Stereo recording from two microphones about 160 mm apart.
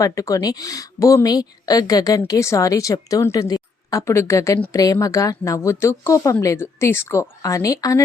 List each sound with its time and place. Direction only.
0.0 s a woman's voice: 20° left (ahead or behind)